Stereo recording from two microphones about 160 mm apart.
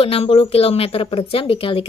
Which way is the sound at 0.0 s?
35° left (ahead or behind).